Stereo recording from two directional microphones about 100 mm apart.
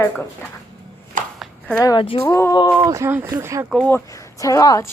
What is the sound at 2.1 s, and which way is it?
A capella, 85° left.